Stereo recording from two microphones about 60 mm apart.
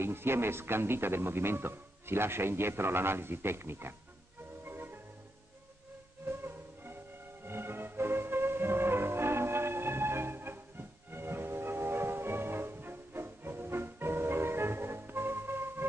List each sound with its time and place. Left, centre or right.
0.0 s speech: right
4.6 s marimba: right
6.2 s music: right